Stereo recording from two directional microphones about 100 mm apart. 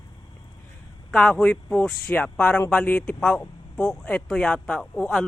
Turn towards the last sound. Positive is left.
turn(degrees=0)  # may be behind; listen again after turning